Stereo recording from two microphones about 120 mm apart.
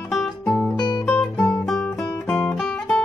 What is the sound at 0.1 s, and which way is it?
Music, 5° left (ahead or behind).